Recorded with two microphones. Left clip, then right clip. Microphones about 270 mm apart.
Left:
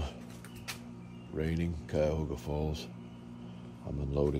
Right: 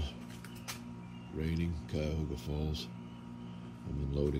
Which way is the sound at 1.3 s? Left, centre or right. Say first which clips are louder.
Left 4 dB; centre.